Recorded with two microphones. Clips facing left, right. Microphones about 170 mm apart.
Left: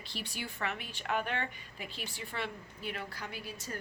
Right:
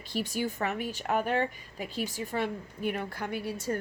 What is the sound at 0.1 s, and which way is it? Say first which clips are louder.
Speech: right 12 dB; 45° right (ahead or behind).